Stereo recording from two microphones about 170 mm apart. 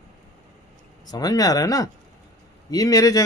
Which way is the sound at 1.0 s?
20° left (ahead or behind).